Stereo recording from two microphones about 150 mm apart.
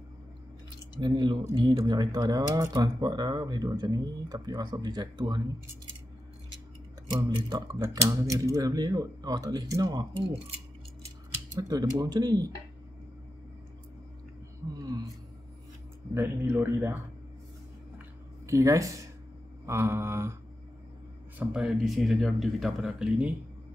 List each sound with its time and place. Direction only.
1.0 s speech: 30° right (ahead or behind)
7.1 s speech: 25° right (ahead or behind)
11.5 s speech: 25° right (ahead or behind)
14.7 s speech: 25° right (ahead or behind)
16.2 s speech: 15° right (ahead or behind)
18.5 s speech: 20° right (ahead or behind)
21.4 s speech: 5° right (ahead or behind)